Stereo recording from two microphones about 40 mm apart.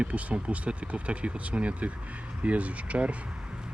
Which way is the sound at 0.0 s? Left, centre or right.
Right.